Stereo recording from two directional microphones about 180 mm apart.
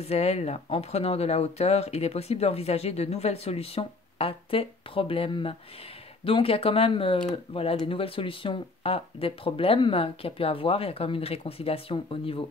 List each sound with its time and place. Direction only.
0.0 s speech: 35° left (ahead or behind)